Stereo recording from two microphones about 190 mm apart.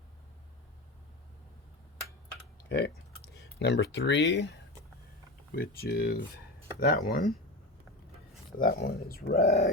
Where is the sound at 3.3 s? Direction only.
65° left (ahead or behind).